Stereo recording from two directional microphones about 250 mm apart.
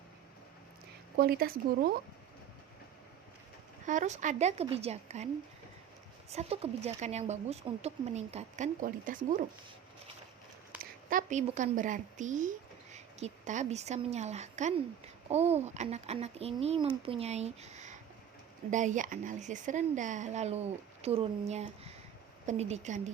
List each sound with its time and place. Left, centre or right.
1.1 s speech: right
3.8 s speech: right
6.3 s speech: right
11.1 s speech: right